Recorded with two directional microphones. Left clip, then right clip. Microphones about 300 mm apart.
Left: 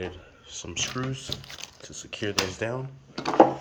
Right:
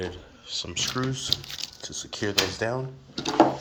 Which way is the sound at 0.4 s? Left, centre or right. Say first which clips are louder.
Right 3 dB; centre.